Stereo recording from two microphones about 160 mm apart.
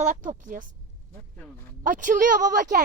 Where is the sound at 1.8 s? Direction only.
55° right (ahead or behind).